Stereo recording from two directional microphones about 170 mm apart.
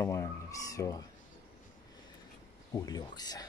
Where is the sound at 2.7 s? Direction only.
20° left (ahead or behind).